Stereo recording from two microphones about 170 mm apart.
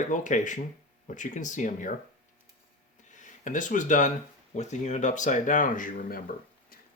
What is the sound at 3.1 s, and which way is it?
Speech, 50° left (ahead or behind).